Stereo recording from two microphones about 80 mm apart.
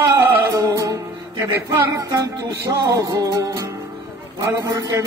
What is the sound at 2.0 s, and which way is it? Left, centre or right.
Music, right.